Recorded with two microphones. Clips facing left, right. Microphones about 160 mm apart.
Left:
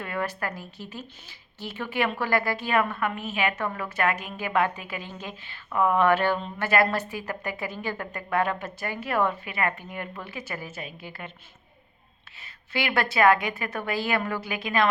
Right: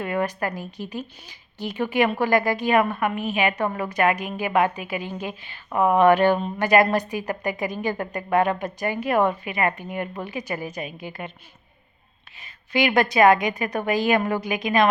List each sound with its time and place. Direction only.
0.0 s a woman's voice: 20° right (ahead or behind)
12.4 s a woman's voice: 15° right (ahead or behind)